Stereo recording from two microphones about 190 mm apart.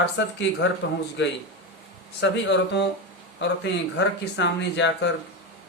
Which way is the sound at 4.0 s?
65° left (ahead or behind).